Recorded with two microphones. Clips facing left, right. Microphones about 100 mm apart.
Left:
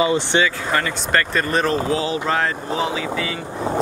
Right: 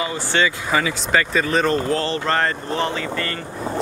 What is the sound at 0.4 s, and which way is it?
Speech, centre (ahead or behind).